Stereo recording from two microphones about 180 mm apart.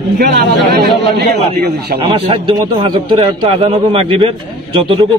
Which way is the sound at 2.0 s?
30° right (ahead or behind).